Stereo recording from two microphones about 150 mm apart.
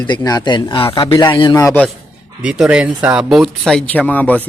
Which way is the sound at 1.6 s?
20° left (ahead or behind).